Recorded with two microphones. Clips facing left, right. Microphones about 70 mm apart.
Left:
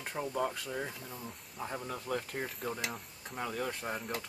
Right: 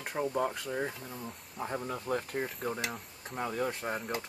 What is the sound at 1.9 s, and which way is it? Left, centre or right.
Speech, right.